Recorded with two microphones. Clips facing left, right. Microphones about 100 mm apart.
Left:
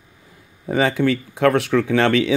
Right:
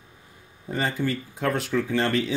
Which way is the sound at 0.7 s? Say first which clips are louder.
Left 8 dB; 85° left.